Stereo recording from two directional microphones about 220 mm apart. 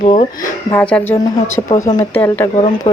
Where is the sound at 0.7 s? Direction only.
5° left (ahead or behind).